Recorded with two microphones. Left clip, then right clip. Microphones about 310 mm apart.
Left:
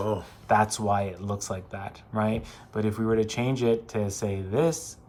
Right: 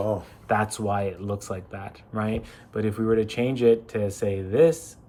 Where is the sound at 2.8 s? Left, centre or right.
Centre.